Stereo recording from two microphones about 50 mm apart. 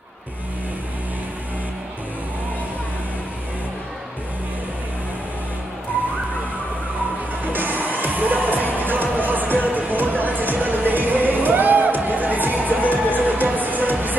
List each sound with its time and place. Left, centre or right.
7.5 s music: right